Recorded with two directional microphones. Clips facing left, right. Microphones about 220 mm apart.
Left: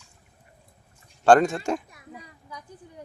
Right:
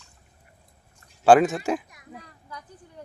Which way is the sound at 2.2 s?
10° left (ahead or behind).